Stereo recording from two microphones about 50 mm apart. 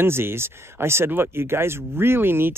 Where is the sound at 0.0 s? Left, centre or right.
Right.